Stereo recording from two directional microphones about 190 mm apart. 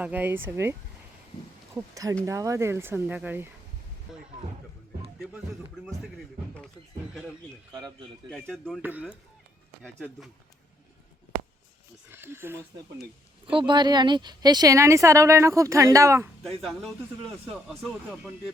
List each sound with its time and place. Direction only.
0.0 s speech: 10° right (ahead or behind)
4.1 s a sound: centre (ahead or behind)
7.7 s speech: 20° right (ahead or behind)
8.3 s speech: 5° left (ahead or behind)
8.8 s speech: 10° right (ahead or behind)
9.8 s speech: 5° left (ahead or behind)
12.1 s speech: 10° right (ahead or behind)
13.5 s speech: 25° right (ahead or behind)
16.4 s speech: centre (ahead or behind)